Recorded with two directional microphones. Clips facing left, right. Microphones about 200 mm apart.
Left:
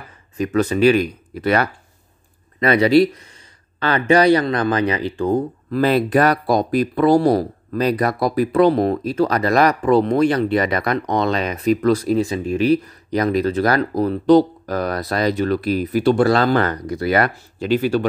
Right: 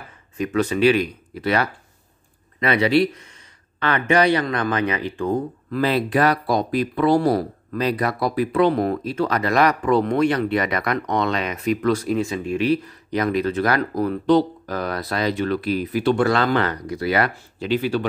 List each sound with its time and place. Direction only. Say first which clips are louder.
0.4 s speech: left 3 dB; 40° left (ahead or behind)